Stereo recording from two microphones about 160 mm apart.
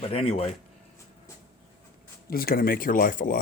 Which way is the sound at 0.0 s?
35° left (ahead or behind).